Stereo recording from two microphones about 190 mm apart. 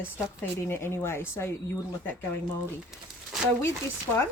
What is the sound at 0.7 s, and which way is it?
Speech, 10° left (ahead or behind).